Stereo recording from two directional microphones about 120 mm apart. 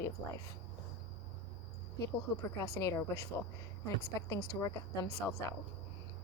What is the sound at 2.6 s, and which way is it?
Speech, 30° left (ahead or behind).